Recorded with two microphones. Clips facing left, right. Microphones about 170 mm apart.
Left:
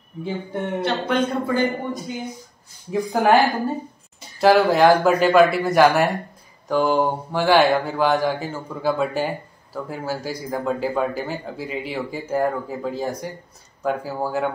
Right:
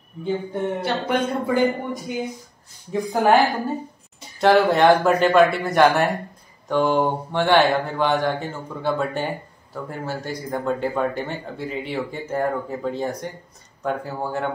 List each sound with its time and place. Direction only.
0.2 s speech: centre (ahead or behind)
2.9 s speech: centre (ahead or behind)